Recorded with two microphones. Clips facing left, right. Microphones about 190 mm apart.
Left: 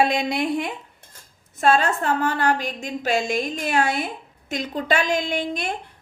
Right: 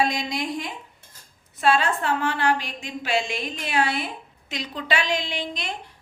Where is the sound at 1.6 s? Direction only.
45° left (ahead or behind).